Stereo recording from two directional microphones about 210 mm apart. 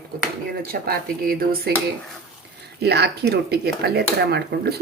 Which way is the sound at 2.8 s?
50° right (ahead or behind).